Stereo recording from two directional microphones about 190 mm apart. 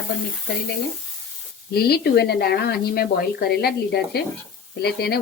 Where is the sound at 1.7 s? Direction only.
55° left (ahead or behind).